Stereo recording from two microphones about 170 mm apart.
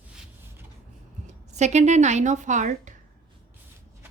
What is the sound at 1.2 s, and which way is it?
A woman's voice, 40° right (ahead or behind).